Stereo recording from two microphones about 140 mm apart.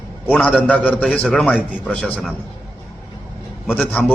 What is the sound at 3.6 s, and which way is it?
Speech, 5° right (ahead or behind).